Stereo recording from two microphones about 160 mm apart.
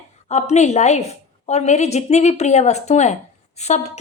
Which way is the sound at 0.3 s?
45° left (ahead or behind).